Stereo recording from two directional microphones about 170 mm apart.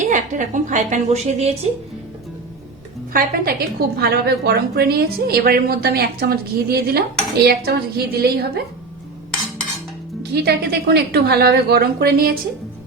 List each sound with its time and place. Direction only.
0.0 s a woman's voice: 45° right (ahead or behind)
3.1 s a woman's voice: 60° right (ahead or behind)
10.3 s a woman's voice: 70° right (ahead or behind)